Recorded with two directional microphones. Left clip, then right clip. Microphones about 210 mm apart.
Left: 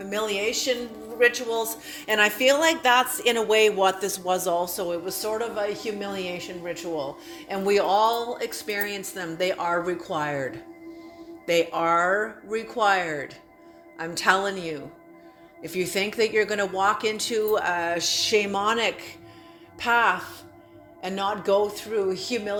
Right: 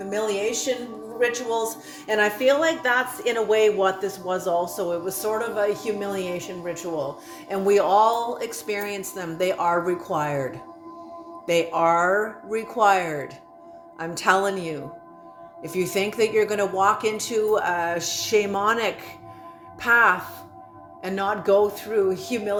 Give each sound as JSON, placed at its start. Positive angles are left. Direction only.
{"t": 0.0, "sound": "speech", "side_deg": 20}